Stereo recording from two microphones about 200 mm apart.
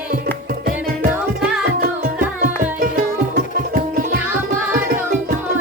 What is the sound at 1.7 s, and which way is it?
Music, 50° right (ahead or behind).